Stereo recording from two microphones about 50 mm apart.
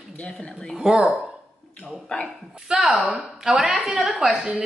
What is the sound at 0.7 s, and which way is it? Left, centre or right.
Speech, centre.